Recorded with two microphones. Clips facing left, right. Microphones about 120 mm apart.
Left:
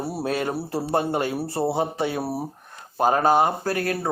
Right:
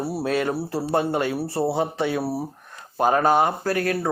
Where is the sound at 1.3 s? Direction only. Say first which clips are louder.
Right 1 dB; 15° left (ahead or behind).